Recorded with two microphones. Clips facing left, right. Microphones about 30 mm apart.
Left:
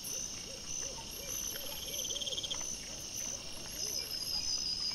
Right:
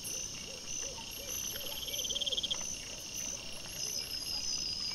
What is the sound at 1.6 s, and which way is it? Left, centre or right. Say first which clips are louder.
Frog: right 3 dB; centre.